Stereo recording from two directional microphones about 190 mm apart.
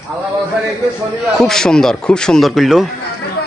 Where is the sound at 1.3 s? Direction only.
5° left (ahead or behind).